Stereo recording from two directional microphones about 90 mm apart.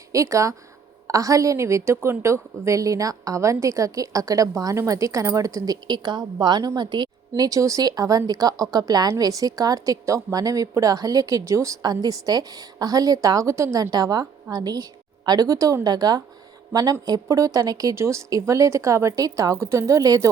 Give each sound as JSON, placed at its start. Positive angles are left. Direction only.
{"t": 0.1, "sound": "a woman's voice", "side_deg": -35}
{"t": 13.9, "sound": "a woman's voice", "side_deg": -45}